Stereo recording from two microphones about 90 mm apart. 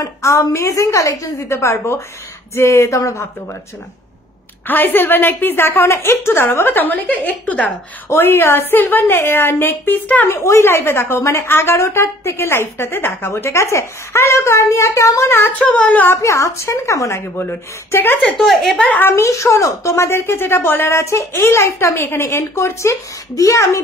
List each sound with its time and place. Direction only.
0.0 s a woman's voice: 35° left (ahead or behind)
4.6 s a woman's voice: 20° left (ahead or behind)
8.1 s a woman's voice: 25° left (ahead or behind)
10.3 s a woman's voice: 30° left (ahead or behind)
16.2 s a woman's voice: 35° left (ahead or behind)
18.4 s a woman's voice: centre (ahead or behind)
18.9 s a woman's voice: 25° left (ahead or behind)